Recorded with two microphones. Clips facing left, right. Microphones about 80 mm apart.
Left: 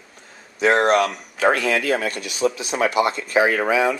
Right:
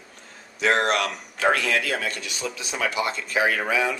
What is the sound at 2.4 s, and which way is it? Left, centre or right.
Speech, left.